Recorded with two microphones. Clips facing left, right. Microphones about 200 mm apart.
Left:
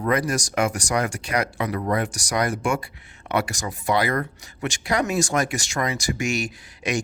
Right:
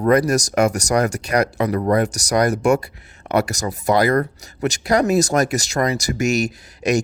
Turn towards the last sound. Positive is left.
turn(degrees=-40)  # may be behind; listen again after turning